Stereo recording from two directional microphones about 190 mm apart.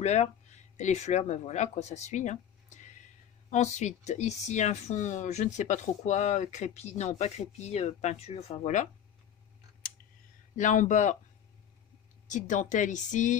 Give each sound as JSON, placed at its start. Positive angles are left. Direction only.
{"t": 0.0, "sound": "speech", "side_deg": 35}
{"t": 10.5, "sound": "speech", "side_deg": 40}
{"t": 12.3, "sound": "speech", "side_deg": 40}